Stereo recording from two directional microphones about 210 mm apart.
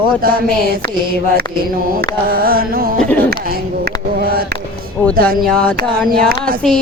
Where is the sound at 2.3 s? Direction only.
45° right (ahead or behind).